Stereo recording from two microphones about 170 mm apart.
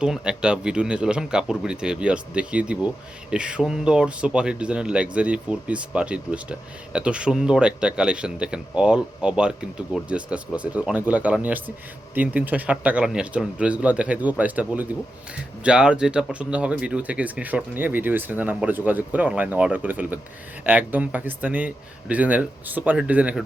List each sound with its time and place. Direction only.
0.0 s speech: 5° right (ahead or behind)